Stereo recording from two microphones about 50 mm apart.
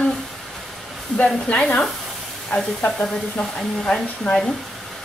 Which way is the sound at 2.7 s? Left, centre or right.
Left.